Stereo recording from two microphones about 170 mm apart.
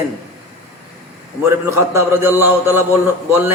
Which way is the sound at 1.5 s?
15° right (ahead or behind).